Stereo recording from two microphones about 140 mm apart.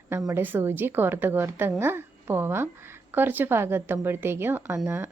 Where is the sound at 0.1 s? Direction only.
20° right (ahead or behind).